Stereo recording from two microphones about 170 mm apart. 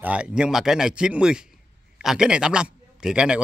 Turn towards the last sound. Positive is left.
turn(degrees=-5)  # may be behind; listen again after turning